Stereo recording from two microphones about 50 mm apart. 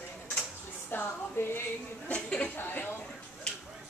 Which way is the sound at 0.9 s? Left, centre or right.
Left.